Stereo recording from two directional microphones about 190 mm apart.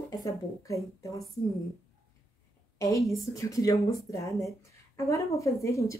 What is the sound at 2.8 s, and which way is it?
Speech, 15° left (ahead or behind).